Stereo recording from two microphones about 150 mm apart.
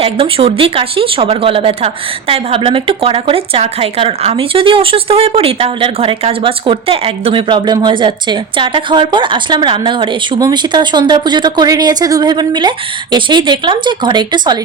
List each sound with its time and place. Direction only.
0.0 s speech: 40° right (ahead or behind)